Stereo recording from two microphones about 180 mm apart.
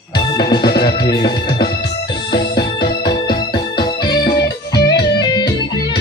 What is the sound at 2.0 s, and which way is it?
Music, 25° left (ahead or behind).